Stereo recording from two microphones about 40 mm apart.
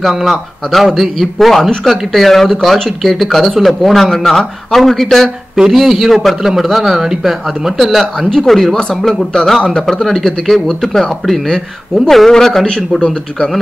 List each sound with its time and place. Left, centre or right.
0.2 s a man's voice: centre
7.7 s a man's voice: centre
8.3 s speech: centre
10.0 s speech: centre
11.4 s speech: centre